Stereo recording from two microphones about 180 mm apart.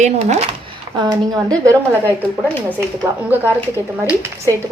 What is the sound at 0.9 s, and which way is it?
A woman's voice, 25° right (ahead or behind).